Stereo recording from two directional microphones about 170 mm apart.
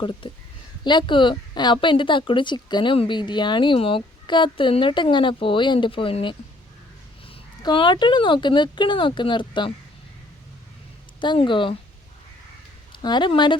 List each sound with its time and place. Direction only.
0.0 s a woman's voice: 30° left (ahead or behind)
7.6 s a woman's voice: 30° left (ahead or behind)
11.2 s a woman's voice: 30° left (ahead or behind)
12.9 s speech: 25° left (ahead or behind)